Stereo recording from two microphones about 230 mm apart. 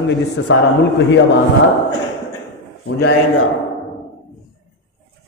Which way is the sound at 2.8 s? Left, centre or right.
Left.